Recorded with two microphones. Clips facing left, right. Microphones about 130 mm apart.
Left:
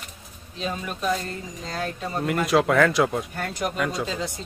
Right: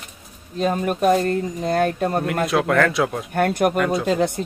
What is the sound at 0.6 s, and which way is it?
Speech, 50° right (ahead or behind).